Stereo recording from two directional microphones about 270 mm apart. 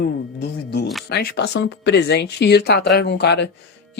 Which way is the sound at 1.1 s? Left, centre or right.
Left.